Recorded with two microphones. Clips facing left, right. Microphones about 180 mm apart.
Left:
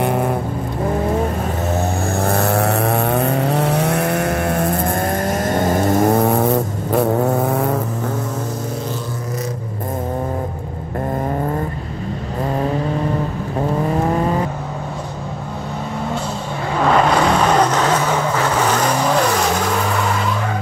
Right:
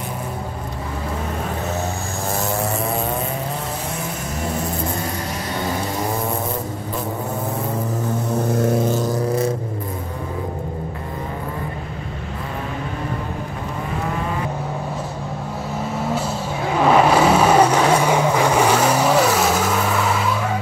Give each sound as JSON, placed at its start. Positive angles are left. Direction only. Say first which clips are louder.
{"t": 0.0, "sound": "vehicle", "louder": "left 11 dB", "side_deg": 65}
{"t": 2.2, "sound": "vehicle", "louder": "left 5 dB", "side_deg": 65}
{"t": 16.8, "sound": "vehicle", "louder": "right 1 dB", "side_deg": -5}